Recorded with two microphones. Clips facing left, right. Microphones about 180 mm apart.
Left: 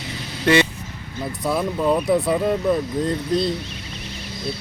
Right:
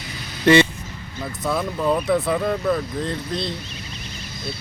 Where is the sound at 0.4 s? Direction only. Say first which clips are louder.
Right 3 dB; 5° left (ahead or behind).